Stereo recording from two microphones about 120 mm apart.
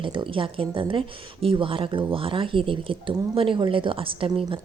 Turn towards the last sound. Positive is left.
turn(degrees=-45)  # may be behind; listen again after turning